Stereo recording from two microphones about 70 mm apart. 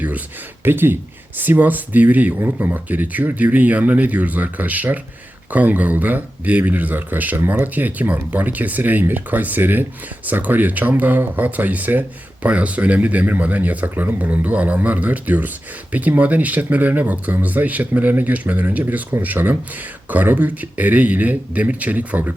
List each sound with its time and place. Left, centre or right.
0.6 s speech: right